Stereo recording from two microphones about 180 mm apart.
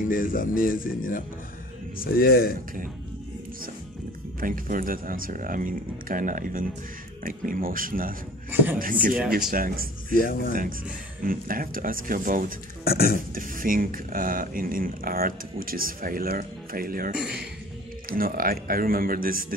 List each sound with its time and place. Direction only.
0.1 s speech: 50° left (ahead or behind)
4.4 s speech: 50° right (ahead or behind)
10.1 s speech: 55° left (ahead or behind)
11.2 s speech: 50° right (ahead or behind)
12.8 s speech: 55° left (ahead or behind)
13.3 s speech: 50° right (ahead or behind)